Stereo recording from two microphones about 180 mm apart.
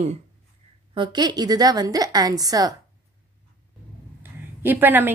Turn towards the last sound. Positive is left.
turn(degrees=-10)  # may be behind; listen again after turning